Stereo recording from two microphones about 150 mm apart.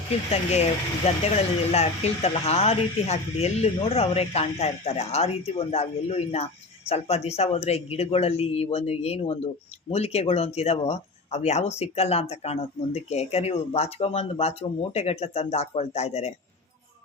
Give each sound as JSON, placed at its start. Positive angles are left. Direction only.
{"t": 1.0, "sound": "speech", "side_deg": 45}